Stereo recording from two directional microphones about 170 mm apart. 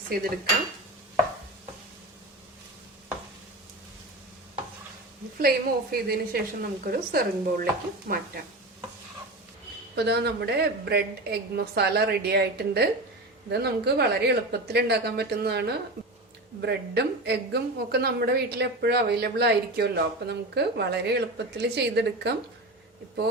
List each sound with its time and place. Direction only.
5.4 s a woman's voice: 60° right (ahead or behind)
9.9 s a woman's voice: 75° right (ahead or behind)